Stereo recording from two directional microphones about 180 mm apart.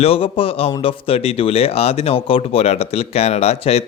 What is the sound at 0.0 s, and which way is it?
Speech, 30° left (ahead or behind).